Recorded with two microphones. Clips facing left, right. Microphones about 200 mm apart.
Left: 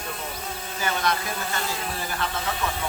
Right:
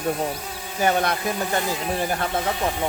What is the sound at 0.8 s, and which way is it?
Speech, 55° right (ahead or behind).